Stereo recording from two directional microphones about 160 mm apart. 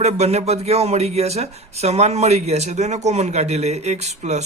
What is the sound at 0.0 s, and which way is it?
Speech, 40° right (ahead or behind).